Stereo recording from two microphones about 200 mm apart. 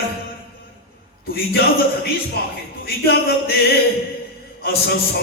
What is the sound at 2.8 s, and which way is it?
Music, 50° left (ahead or behind).